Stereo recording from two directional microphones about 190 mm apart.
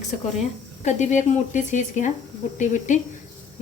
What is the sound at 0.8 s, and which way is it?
A woman's voice, 40° left (ahead or behind).